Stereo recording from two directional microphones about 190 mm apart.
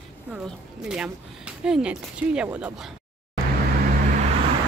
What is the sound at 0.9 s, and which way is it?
Speech, 5° right (ahead or behind).